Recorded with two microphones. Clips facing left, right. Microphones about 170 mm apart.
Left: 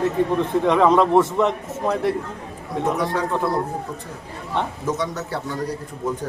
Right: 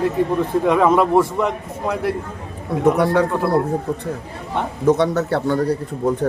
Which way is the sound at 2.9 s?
65° right (ahead or behind).